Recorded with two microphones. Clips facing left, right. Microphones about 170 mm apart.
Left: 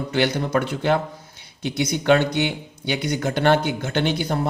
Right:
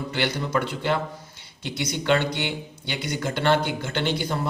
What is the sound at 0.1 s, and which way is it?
Speech, 50° left (ahead or behind).